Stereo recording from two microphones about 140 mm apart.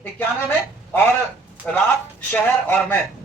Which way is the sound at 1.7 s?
5° left (ahead or behind).